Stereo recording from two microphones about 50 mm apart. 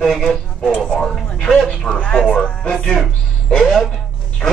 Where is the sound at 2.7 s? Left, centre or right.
Centre.